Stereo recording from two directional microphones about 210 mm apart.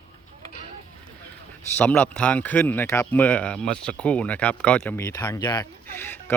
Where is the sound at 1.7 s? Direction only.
10° left (ahead or behind).